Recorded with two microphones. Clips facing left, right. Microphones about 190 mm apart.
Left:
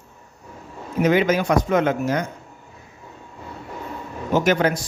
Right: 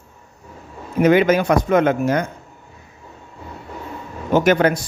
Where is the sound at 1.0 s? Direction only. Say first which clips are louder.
Right 4 dB; 55° right (ahead or behind).